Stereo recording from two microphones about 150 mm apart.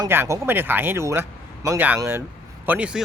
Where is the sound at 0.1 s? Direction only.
15° right (ahead or behind).